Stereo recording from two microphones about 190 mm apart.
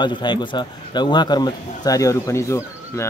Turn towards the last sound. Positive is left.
turn(degrees=15)  # may be behind; listen again after turning